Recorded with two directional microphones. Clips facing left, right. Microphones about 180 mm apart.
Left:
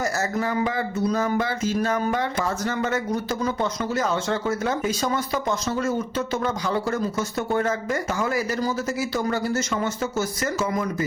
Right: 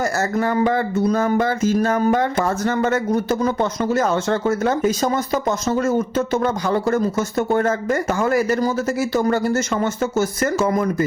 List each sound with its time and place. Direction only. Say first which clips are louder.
0.0 s speech: right 5 dB; 55° right (ahead or behind)